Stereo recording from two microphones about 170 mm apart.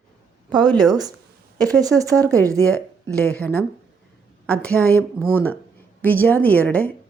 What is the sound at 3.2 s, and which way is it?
A woman's voice, 10° left (ahead or behind).